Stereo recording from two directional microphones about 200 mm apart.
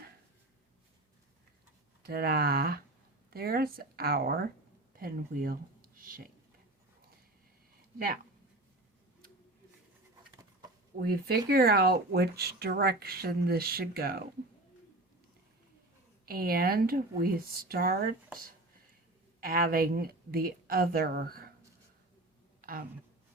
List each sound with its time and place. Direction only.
2.0 s speech: 50° right (ahead or behind)
7.9 s speech: 45° right (ahead or behind)
10.9 s speech: 50° right (ahead or behind)
16.2 s speech: 50° right (ahead or behind)
19.4 s speech: 45° right (ahead or behind)
22.6 s a sound: 45° right (ahead or behind)